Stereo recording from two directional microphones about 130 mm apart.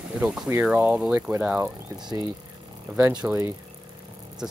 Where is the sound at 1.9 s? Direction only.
30° right (ahead or behind).